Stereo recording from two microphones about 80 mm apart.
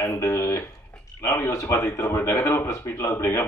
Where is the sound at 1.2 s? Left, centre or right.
Left.